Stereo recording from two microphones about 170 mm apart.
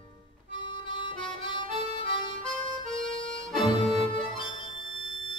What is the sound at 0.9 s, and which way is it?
Harmonica, 30° left (ahead or behind).